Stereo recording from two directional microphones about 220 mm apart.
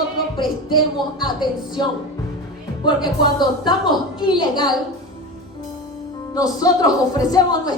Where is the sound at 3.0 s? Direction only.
20° left (ahead or behind).